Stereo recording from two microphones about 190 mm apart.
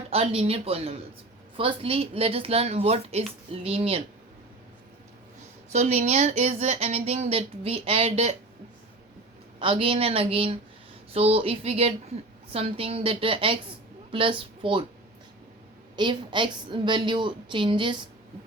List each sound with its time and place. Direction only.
0.1 s a woman's voice: 30° right (ahead or behind)
5.7 s speech: 35° right (ahead or behind)
9.6 s a woman's voice: 30° right (ahead or behind)
16.0 s a woman's voice: 25° right (ahead or behind)